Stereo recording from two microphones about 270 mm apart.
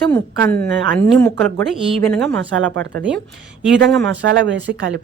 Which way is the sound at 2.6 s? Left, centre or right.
Right.